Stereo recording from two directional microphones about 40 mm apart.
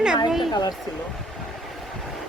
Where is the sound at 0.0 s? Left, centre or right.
Centre.